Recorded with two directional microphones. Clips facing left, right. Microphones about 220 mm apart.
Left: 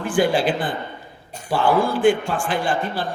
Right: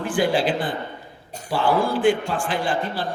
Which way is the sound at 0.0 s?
50° left (ahead or behind).